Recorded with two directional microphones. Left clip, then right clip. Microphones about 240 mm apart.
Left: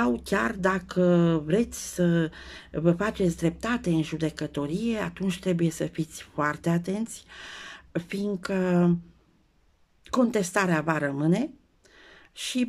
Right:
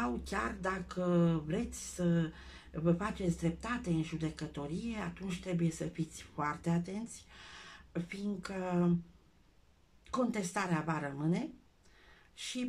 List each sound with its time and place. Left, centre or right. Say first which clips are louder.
0.0 s speech: left 11 dB; left
10.0 s speech: left 10 dB; left
12.0 s a sound: left 10 dB; left